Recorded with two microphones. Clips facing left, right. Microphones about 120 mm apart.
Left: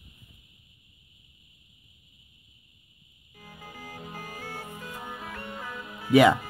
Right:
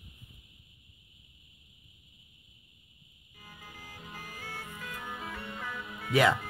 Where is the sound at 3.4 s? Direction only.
45° left (ahead or behind).